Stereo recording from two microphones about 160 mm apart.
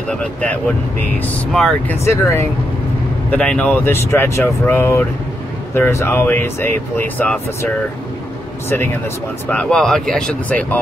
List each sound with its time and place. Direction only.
0.1 s speech: 5° left (ahead or behind)
2.0 s speech: 15° left (ahead or behind)
3.3 s speech: 5° left (ahead or behind)